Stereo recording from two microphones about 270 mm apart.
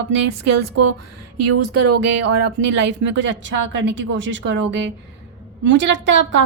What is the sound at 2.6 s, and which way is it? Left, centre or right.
A woman's voice, right.